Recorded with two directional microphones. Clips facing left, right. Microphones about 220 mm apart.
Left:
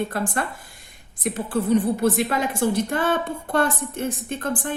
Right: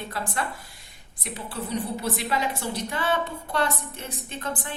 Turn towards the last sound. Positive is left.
turn(degrees=50)  # may be behind; listen again after turning